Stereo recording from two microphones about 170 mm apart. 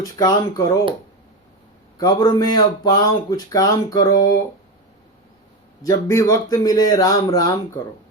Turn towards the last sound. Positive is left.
turn(degrees=20)  # may be behind; listen again after turning